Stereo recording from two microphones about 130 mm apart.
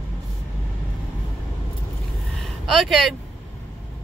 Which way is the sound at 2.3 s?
Centre (ahead or behind).